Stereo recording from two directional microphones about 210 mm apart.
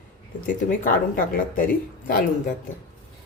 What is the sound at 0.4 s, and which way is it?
Speech, 40° left (ahead or behind).